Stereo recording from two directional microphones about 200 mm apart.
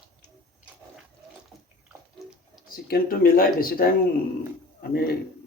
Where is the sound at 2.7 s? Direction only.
50° left (ahead or behind).